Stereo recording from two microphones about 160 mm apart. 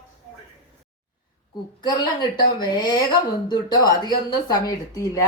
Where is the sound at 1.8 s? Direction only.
30° left (ahead or behind).